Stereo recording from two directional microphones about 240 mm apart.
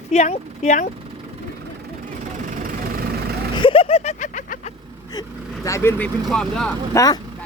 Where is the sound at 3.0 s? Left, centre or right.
Right.